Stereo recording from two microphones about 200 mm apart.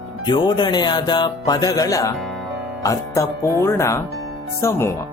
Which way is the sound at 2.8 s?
15° left (ahead or behind).